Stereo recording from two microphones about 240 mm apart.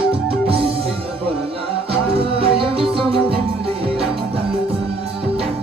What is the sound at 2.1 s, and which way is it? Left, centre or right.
Music, right.